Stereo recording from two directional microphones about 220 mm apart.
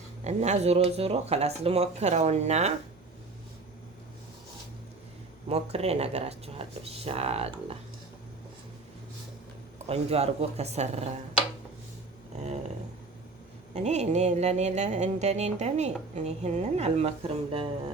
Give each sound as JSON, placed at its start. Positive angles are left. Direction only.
{"t": 0.3, "sound": "speech", "side_deg": -30}
{"t": 5.5, "sound": "speech", "side_deg": -30}
{"t": 9.7, "sound": "speech", "side_deg": -30}
{"t": 13.7, "sound": "a sound", "side_deg": -30}
{"t": 16.1, "sound": "speech", "side_deg": -30}